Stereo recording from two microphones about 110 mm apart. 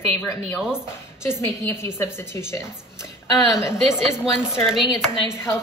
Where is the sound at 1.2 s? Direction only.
20° left (ahead or behind).